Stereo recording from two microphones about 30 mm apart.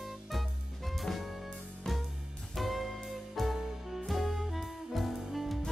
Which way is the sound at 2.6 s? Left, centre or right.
Centre.